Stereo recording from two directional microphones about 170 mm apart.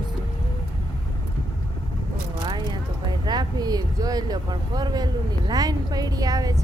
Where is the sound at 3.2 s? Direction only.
25° right (ahead or behind).